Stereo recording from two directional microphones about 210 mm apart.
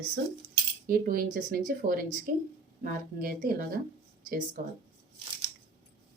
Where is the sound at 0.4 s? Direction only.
45° right (ahead or behind).